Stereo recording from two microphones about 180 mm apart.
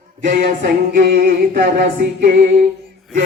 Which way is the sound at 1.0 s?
55° right (ahead or behind).